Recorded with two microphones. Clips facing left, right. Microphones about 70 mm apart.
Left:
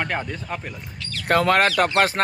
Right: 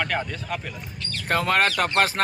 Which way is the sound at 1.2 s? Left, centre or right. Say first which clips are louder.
Left 4 dB; left.